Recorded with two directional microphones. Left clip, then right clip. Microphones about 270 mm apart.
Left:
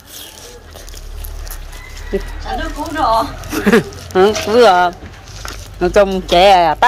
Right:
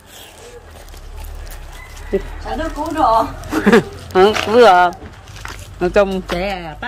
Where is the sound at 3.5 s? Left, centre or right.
Centre.